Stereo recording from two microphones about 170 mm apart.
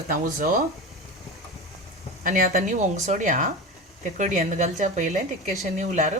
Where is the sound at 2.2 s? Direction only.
55° right (ahead or behind).